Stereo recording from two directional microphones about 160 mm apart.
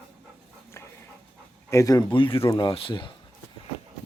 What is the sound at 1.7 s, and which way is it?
Speech, 20° left (ahead or behind).